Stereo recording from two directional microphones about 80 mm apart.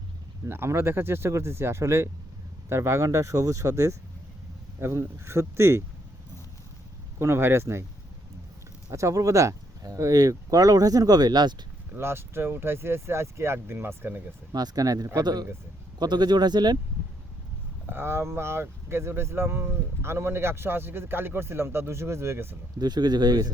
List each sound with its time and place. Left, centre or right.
0.4 s speech: right
7.2 s speech: right
8.9 s speech: right
11.9 s speech: right
14.5 s speech: right
17.8 s speech: right
22.8 s speech: right